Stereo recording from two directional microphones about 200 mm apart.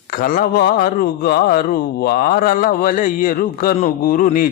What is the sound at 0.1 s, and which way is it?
A man's voice, 45° left (ahead or behind).